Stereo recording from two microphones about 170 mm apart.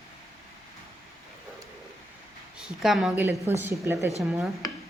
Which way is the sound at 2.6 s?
5° right (ahead or behind).